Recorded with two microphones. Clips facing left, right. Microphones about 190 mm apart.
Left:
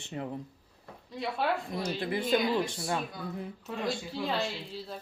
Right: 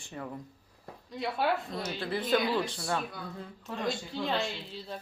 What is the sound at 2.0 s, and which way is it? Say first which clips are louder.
Speech: even; 15° left (ahead or behind).